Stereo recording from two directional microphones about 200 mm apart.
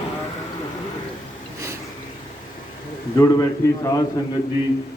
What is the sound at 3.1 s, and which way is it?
Speech, 15° left (ahead or behind).